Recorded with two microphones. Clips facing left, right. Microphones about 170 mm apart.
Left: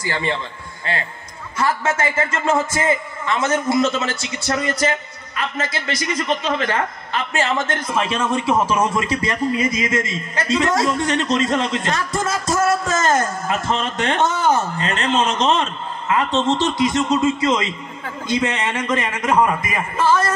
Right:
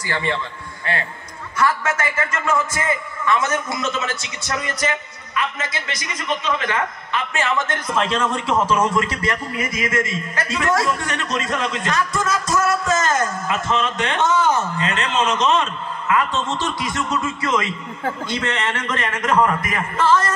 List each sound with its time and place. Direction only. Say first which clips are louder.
0.0 s a man's voice: left 1 dB; 25° left (ahead or behind)
1.6 s a man's voice: left 1 dB; 25° left (ahead or behind)
7.9 s a man's voice: even; 10° left (ahead or behind)